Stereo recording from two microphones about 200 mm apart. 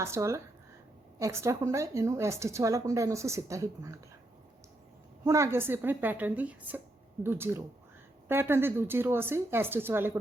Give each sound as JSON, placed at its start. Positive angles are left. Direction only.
{"t": 0.0, "sound": "a woman's voice", "side_deg": -15}
{"t": 5.2, "sound": "a woman's voice", "side_deg": -15}